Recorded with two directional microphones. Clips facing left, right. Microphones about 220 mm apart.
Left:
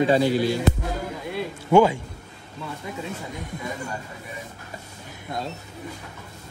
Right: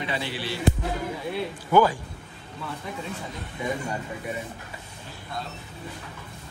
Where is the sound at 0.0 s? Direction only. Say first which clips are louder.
Left 12 dB; 45° left (ahead or behind).